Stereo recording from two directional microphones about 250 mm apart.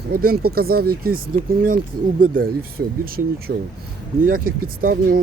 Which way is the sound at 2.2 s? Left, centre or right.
Right.